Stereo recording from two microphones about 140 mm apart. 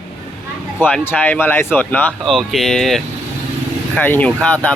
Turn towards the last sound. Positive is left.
turn(degrees=10)  # may be behind; listen again after turning